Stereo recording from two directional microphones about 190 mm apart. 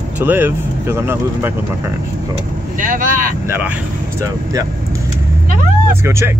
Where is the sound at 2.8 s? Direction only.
45° right (ahead or behind).